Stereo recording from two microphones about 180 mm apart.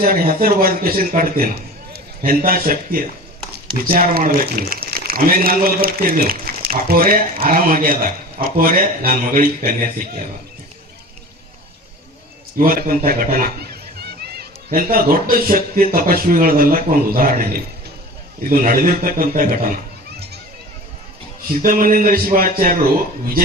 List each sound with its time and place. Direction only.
0.0 s a man's voice: 55° right (ahead or behind)
12.5 s speech: 55° right (ahead or behind)
21.6 s speech: 50° right (ahead or behind)